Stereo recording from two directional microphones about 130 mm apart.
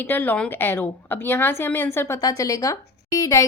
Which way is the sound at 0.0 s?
15° left (ahead or behind).